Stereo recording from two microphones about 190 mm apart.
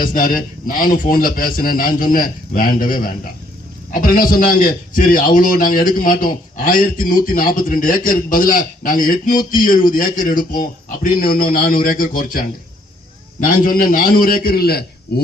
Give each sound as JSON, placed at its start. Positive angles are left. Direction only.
{"t": 0.0, "sound": "a man's voice", "side_deg": 50}